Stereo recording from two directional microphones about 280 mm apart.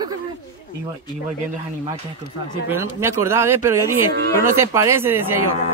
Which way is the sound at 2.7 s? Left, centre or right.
Centre.